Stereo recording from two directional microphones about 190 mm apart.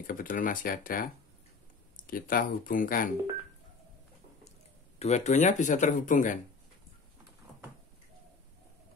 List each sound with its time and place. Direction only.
0.0 s speech: 45° left (ahead or behind)
4.9 s speech: 35° left (ahead or behind)